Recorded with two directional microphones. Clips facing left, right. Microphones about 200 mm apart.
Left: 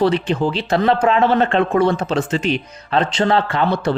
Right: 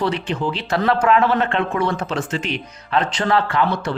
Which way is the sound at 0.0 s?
35° left (ahead or behind).